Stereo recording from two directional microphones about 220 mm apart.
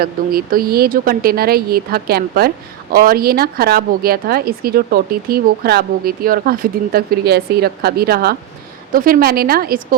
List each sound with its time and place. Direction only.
0.0 s a woman's voice: 45° right (ahead or behind)